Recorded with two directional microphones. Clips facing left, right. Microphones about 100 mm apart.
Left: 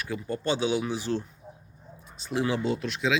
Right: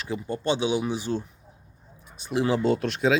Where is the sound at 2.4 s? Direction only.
35° right (ahead or behind).